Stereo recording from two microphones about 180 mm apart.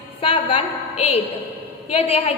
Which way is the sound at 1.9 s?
35° left (ahead or behind).